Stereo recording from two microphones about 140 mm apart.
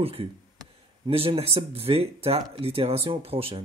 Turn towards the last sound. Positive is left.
turn(degrees=-40)  # may be behind; listen again after turning